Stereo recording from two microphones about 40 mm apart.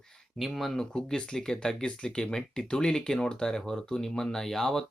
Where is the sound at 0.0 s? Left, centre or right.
Centre.